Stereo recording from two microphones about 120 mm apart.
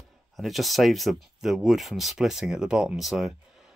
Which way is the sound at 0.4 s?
Centre (ahead or behind).